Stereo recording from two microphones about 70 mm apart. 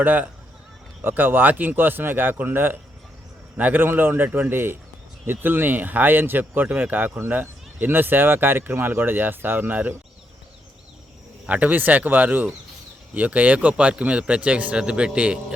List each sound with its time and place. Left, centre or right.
0.0 s speech: right
11.4 s speech: right